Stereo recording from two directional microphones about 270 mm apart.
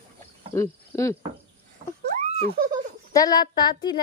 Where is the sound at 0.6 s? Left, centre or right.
Centre.